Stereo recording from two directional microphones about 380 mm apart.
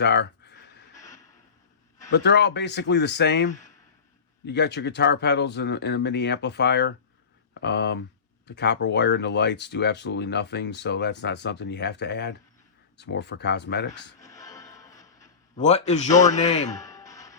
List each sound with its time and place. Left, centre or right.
0.0 s a sound: left
2.0 s speech: left
14.2 s music: centre